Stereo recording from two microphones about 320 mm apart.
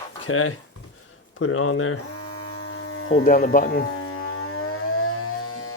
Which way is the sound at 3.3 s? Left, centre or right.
Left.